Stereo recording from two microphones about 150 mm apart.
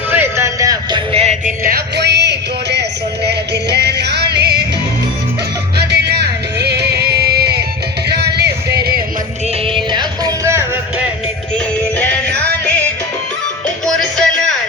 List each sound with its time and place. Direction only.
0.1 s music: 15° right (ahead or behind)
1.1 s music: 40° right (ahead or behind)
1.5 s music: 80° right
5.7 s music: 90° right
9.6 s music: 30° right (ahead or behind)
11.5 s music: 10° left (ahead or behind)